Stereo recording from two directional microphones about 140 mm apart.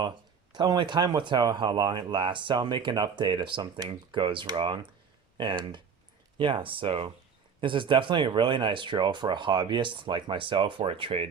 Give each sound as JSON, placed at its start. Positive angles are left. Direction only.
{"t": 0.5, "sound": "speech", "side_deg": -30}